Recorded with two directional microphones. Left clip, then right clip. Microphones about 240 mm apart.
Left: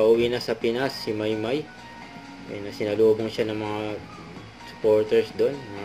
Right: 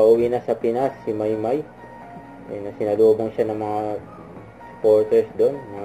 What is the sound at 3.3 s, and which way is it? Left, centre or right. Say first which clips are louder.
Speech: right 5 dB; left.